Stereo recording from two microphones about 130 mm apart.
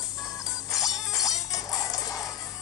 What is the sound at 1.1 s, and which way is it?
Music, 25° left (ahead or behind).